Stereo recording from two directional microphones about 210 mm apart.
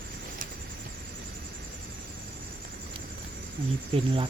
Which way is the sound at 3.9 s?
25° right (ahead or behind).